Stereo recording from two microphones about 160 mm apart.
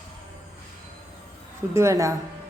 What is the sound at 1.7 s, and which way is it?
Speech, 20° right (ahead or behind).